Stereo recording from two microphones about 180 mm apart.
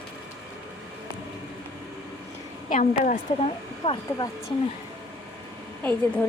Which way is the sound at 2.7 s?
45° left (ahead or behind).